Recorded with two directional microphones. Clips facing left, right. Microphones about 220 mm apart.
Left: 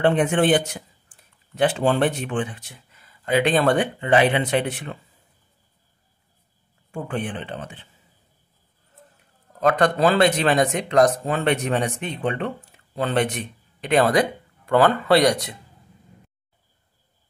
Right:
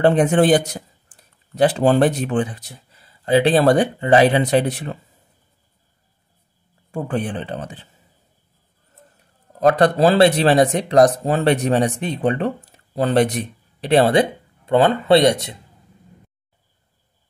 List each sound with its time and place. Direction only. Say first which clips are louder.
0.0 s speech: right 4 dB; 35° right (ahead or behind)
6.9 s speech: right 4 dB; 35° right (ahead or behind)
9.6 s speech: right 4 dB; 35° right (ahead or behind)